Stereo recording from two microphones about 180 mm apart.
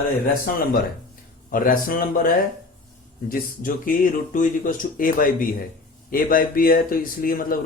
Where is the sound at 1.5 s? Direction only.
50° left (ahead or behind).